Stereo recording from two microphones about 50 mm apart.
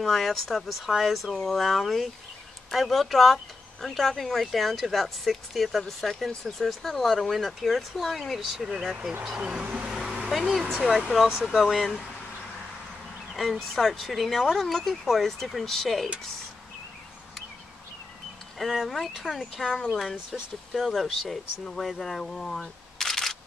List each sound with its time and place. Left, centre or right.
0.0 s speech: centre
9.4 s speech: right
10.3 s speech: centre
11.0 s speech: centre
13.3 s speech: centre
18.6 s speech: centre